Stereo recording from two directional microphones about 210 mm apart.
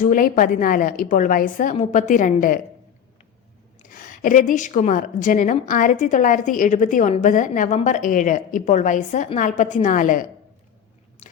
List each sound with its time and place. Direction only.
0.0 s a woman's voice: 40° left (ahead or behind)
3.8 s a woman's voice: 40° left (ahead or behind)